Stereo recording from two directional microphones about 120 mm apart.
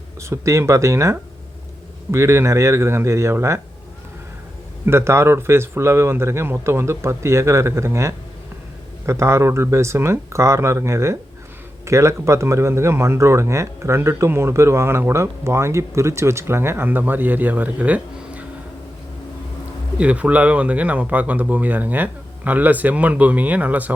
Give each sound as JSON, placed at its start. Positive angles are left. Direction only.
{"t": 0.2, "sound": "speech", "side_deg": -25}
{"t": 4.9, "sound": "speech", "side_deg": -20}
{"t": 20.0, "sound": "speech", "side_deg": -10}